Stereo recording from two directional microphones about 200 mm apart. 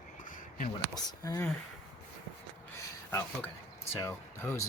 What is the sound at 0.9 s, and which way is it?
Speech, 15° left (ahead or behind).